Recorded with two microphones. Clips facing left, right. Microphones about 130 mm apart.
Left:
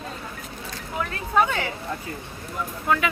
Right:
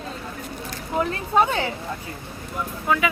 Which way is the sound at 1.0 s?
30° right (ahead or behind).